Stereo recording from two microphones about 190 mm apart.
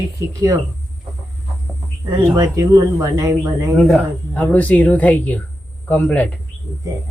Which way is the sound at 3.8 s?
5° left (ahead or behind).